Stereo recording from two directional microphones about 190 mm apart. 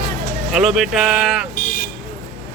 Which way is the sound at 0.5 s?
Centre (ahead or behind).